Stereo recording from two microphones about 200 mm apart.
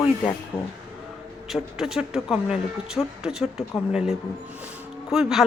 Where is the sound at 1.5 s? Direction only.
Centre (ahead or behind).